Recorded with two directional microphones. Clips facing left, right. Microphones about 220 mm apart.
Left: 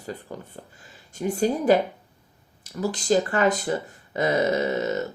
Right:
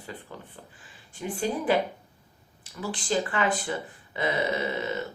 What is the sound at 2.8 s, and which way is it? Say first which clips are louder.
Speech: left 6 dB; 40° left (ahead or behind).